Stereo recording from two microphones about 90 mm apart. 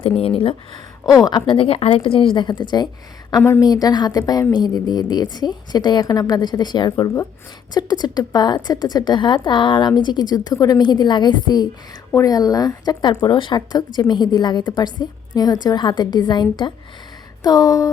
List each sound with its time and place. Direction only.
0.2 s speech: 90° left
1.0 s a woman's voice: 45° left (ahead or behind)
1.5 s a woman's voice: 90° left; by 16.7 s 55° left (ahead or behind)
17.4 s a sound: 45° left (ahead or behind)